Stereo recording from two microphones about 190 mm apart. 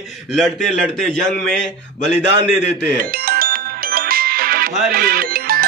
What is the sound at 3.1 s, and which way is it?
Music, 50° right (ahead or behind).